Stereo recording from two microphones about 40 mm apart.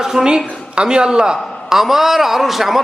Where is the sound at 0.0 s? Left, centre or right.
Centre.